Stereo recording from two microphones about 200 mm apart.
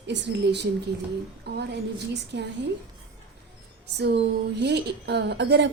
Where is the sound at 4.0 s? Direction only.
55° right (ahead or behind).